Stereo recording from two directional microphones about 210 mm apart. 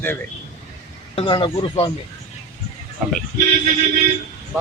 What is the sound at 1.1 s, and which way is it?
Speech, 20° left (ahead or behind).